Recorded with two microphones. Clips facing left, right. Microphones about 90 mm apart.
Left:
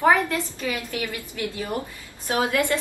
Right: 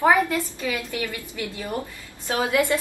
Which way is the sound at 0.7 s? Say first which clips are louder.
Left 1 dB; 20° left (ahead or behind).